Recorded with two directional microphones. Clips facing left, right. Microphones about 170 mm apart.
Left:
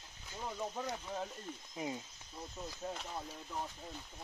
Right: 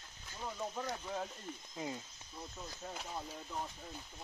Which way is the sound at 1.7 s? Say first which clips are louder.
Left 2 dB; 20° left (ahead or behind).